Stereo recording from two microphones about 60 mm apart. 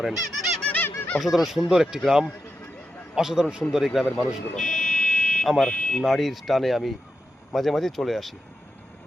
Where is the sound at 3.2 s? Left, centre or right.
Centre.